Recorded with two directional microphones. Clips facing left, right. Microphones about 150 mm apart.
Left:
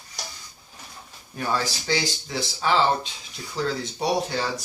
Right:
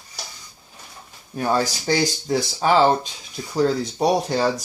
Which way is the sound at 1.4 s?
40° right (ahead or behind).